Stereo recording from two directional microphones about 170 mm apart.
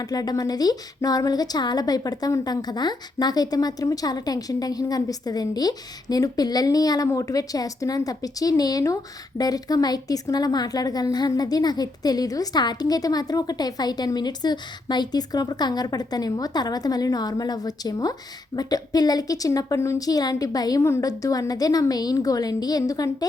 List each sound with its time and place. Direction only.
0.0 s speech: 20° left (ahead or behind)